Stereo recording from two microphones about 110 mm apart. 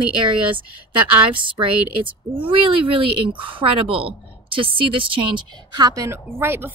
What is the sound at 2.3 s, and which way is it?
Speech, 50° right (ahead or behind).